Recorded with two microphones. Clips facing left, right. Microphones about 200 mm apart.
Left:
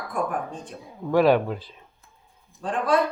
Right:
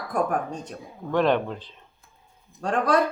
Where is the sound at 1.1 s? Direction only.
5° left (ahead or behind).